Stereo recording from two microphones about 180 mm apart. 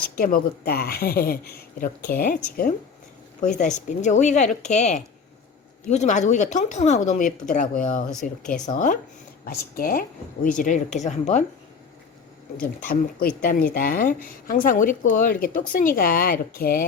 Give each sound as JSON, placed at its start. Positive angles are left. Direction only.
{"t": 0.2, "sound": "a woman's voice", "side_deg": 55}
{"t": 8.2, "sound": "speech", "side_deg": 5}
{"t": 8.6, "sound": "a woman's voice", "side_deg": 45}
{"t": 12.9, "sound": "a woman's voice", "side_deg": 55}